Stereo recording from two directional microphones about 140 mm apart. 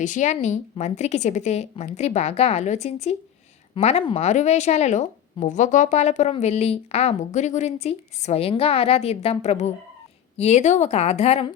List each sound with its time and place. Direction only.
0.0 s a woman's voice: 60° left (ahead or behind)